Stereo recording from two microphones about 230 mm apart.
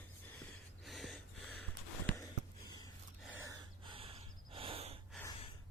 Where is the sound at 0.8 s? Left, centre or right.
Centre.